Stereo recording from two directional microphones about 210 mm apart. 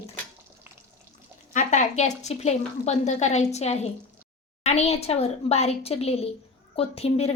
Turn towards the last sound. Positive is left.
turn(degrees=30)  # may be behind; listen again after turning